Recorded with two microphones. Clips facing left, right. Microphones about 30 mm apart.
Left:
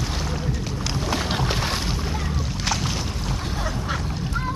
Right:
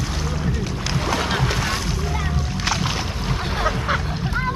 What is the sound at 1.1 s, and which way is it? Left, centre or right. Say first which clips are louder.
Boat: right 3 dB; right.